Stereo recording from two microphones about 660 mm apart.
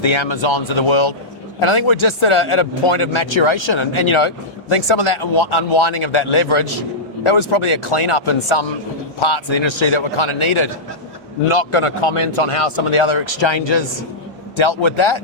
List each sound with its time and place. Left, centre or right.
0.0 s speech: left